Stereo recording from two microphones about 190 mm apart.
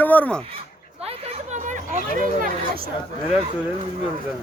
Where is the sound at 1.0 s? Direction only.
35° right (ahead or behind).